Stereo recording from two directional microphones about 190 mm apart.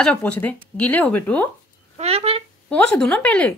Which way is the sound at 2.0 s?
30° right (ahead or behind).